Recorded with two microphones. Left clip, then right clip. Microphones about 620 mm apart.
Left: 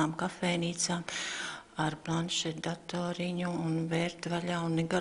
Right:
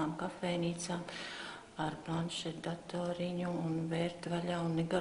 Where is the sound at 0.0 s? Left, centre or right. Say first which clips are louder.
Left 6 dB; left.